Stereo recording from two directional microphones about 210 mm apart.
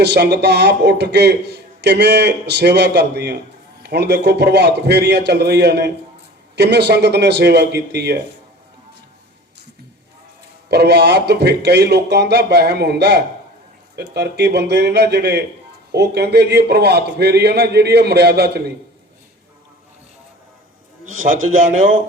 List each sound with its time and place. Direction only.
0.0 s a man's voice: 50° right (ahead or behind)
10.7 s a man's voice: 50° right (ahead or behind)
21.0 s a man's voice: 40° right (ahead or behind)